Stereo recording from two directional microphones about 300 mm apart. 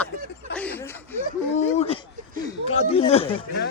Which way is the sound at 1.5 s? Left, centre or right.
Left.